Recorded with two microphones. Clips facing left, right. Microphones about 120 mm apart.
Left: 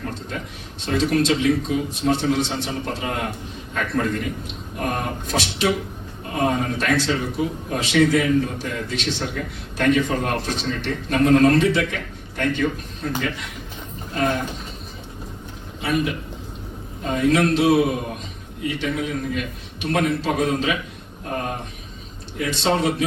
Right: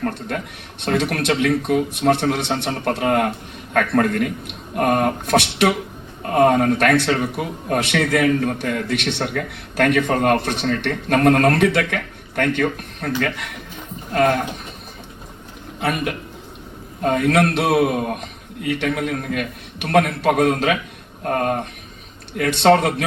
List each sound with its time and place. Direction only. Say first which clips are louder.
0.0 s a man's voice: right 5 dB; 60° right (ahead or behind)
15.8 s a man's voice: even; 60° right (ahead or behind)